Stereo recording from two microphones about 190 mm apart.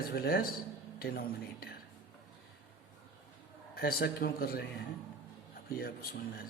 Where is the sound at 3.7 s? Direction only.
55° left (ahead or behind).